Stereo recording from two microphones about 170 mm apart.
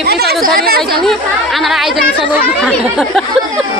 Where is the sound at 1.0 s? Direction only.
Centre (ahead or behind).